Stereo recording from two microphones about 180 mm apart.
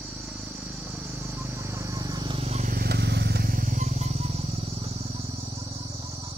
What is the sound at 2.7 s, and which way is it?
Motorcycle, 60° right (ahead or behind).